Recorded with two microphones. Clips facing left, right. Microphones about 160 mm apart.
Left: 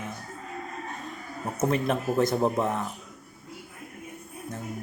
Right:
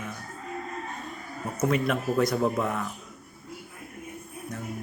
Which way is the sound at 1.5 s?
30° left (ahead or behind).